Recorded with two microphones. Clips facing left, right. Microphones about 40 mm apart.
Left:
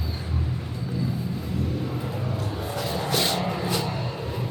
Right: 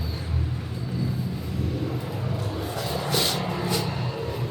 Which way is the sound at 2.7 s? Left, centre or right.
Centre.